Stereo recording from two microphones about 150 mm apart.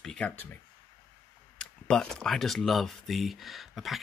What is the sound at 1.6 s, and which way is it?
Speech, 5° left (ahead or behind).